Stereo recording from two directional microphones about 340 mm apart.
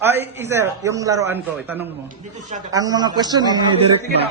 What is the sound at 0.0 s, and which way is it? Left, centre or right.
Speech, centre.